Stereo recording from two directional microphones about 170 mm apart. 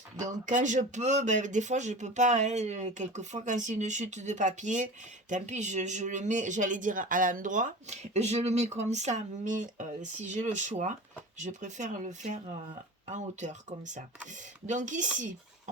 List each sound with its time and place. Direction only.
0.2 s speech: 45° right (ahead or behind)